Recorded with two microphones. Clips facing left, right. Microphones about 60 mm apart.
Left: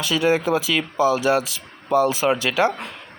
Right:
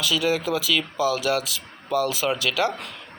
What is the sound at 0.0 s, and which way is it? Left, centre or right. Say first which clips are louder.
Speech: left 4 dB; left.